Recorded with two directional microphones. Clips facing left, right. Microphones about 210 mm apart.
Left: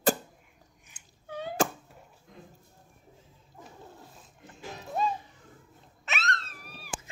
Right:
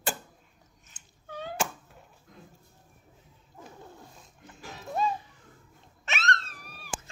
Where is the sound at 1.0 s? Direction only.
90° left.